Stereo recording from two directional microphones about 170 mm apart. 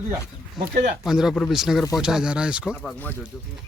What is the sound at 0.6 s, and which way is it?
Speech, centre (ahead or behind).